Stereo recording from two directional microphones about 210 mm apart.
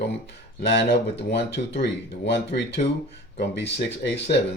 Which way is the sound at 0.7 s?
55° left (ahead or behind).